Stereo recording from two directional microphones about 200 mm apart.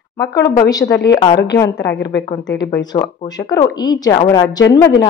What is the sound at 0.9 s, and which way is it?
Speech, 60° left (ahead or behind).